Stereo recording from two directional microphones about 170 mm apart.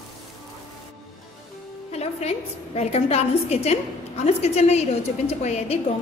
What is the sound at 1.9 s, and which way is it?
A woman's voice, 40° left (ahead or behind).